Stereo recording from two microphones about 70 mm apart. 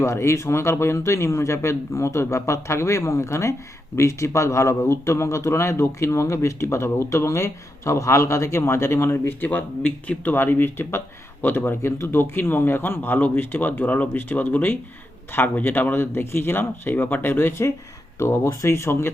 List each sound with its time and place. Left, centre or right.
0.0 s a man's voice: left
9.5 s speech: centre
10.3 s speech: left